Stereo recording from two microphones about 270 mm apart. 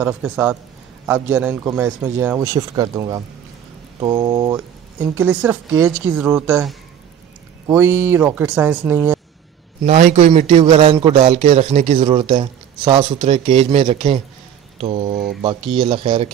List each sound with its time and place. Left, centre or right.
0.0 s a man's voice: centre
9.8 s a man's voice: right